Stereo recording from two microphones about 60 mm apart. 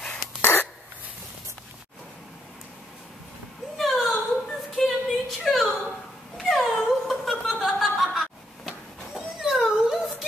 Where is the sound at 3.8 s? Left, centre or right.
Centre.